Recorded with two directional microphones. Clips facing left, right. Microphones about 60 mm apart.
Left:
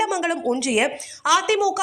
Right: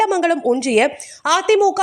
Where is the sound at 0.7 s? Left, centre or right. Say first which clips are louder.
Right 6 dB; right.